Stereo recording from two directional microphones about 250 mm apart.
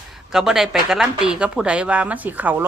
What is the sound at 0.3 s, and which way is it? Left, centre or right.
A woman's voice, centre.